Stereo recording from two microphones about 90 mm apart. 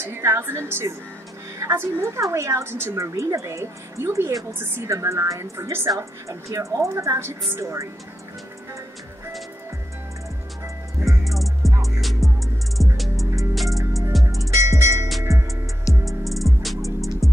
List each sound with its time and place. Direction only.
0.0 s a woman's voice: 30° right (ahead or behind)
4.6 s a woman's voice: 30° right (ahead or behind)
11.1 s music: centre (ahead or behind)
14.4 s music: 35° right (ahead or behind)
16.1 s music: centre (ahead or behind)